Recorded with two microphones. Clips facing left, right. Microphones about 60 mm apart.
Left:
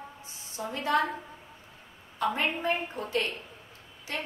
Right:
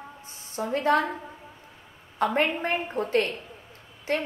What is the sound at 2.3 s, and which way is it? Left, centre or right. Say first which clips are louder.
A woman's voice: right 2 dB; right.